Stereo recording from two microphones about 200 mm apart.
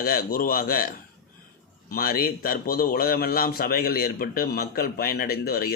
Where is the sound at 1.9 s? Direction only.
50° left (ahead or behind).